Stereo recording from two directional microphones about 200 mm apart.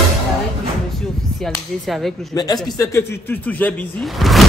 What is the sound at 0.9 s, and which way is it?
Speech, centre (ahead or behind).